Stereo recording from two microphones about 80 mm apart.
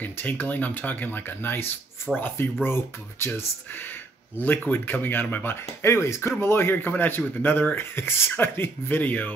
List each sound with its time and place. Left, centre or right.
0.0 s speech: left